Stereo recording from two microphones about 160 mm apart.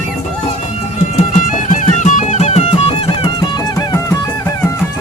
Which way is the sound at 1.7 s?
50° left (ahead or behind).